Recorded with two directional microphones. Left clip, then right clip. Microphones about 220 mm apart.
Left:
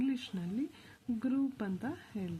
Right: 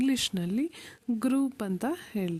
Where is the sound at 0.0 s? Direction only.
50° right (ahead or behind).